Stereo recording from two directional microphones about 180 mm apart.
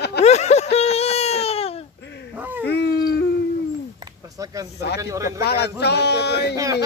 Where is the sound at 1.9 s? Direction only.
70° left (ahead or behind).